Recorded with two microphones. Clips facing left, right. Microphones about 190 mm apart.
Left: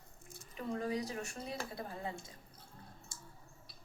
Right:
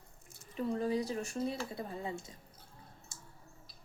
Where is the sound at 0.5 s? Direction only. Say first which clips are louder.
Right 4 dB; 30° right (ahead or behind).